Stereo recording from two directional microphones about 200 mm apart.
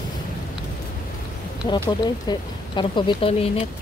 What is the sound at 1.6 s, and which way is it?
Speech, 20° left (ahead or behind).